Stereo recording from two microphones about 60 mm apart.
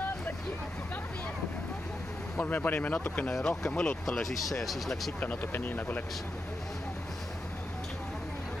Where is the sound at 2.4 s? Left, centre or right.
Left.